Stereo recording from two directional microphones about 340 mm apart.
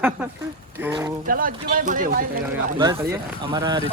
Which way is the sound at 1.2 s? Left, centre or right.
Right.